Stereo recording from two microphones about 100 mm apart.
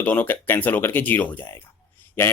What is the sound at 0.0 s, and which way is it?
Speech, 15° left (ahead or behind).